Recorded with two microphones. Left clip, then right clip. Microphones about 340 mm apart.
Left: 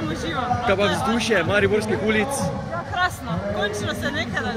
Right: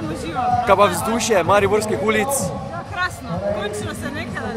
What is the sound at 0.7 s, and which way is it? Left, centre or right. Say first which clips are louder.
A man's voice: right 5 dB; centre.